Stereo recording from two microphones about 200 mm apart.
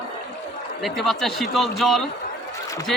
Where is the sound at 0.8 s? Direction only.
Centre (ahead or behind).